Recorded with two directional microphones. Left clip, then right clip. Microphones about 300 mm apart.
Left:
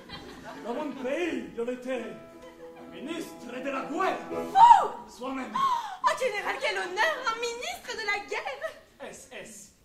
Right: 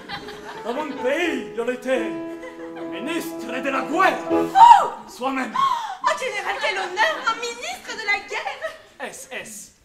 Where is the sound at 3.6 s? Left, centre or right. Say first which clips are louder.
Right 10 dB; right.